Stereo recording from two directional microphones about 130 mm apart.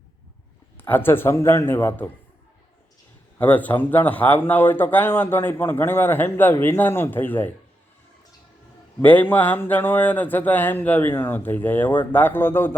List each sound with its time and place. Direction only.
0.8 s speech: 15° left (ahead or behind)
3.3 s speech: 10° left (ahead or behind)
9.0 s speech: 15° left (ahead or behind)